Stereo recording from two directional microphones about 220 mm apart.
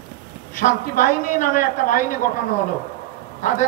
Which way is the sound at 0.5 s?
35° left (ahead or behind).